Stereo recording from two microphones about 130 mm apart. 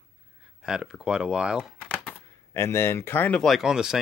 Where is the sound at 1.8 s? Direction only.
10° left (ahead or behind).